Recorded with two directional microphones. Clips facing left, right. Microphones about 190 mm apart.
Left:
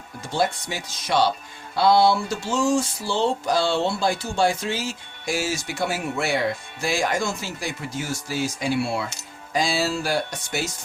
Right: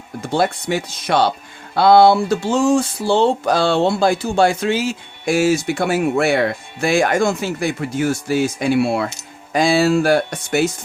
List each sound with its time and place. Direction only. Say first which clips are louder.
0.3 s speech: right 6 dB; 60° right (ahead or behind)